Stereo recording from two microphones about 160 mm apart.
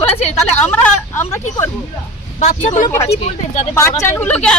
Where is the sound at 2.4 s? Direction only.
50° left (ahead or behind).